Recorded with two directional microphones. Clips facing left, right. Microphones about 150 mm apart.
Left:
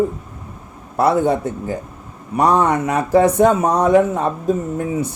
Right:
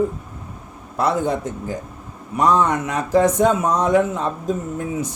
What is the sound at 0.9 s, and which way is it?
Speech, 65° left (ahead or behind).